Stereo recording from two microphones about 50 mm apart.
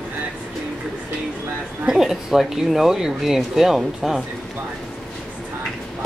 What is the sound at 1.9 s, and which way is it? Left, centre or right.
A woman's voice, centre.